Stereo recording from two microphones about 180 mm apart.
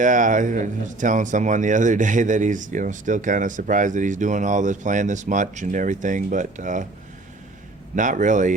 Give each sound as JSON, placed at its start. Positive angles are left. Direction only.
{"t": 0.0, "sound": "speech", "side_deg": -45}
{"t": 7.9, "sound": "speech", "side_deg": -45}